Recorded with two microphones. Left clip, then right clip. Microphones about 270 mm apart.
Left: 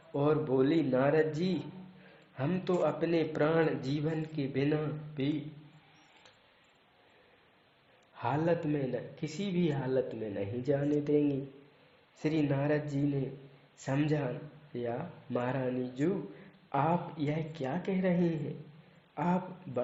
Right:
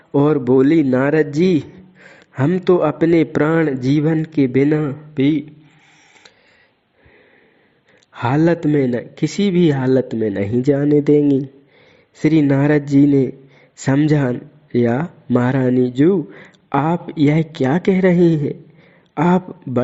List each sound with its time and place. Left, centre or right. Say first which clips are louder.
0.1 s a man's voice: right 15 dB; right
8.1 s a man's voice: right 14 dB; right